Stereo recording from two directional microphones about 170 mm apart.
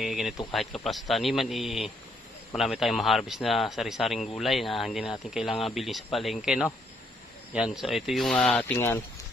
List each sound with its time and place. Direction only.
0.0 s speech: centre (ahead or behind); by 9.0 s 15° left (ahead or behind)